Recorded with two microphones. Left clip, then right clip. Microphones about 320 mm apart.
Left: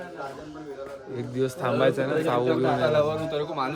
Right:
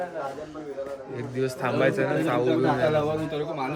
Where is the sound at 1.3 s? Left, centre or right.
Left.